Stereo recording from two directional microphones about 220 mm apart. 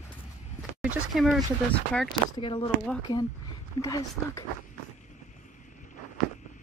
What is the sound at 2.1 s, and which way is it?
Speech, 20° left (ahead or behind).